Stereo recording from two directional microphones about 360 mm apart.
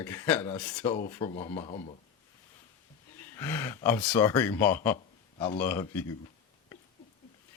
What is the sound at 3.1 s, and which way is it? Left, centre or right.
Speech, centre.